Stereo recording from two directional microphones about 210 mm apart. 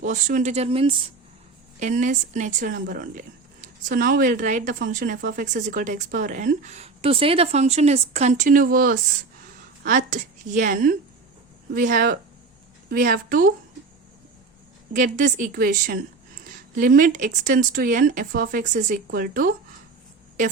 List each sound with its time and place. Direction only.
0.0 s speech: 35° right (ahead or behind)
1.8 s speech: 35° right (ahead or behind)
14.9 s speech: 40° right (ahead or behind)